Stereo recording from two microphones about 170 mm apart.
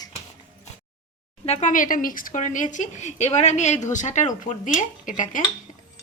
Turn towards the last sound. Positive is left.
turn(degrees=50)  # may be behind; listen again after turning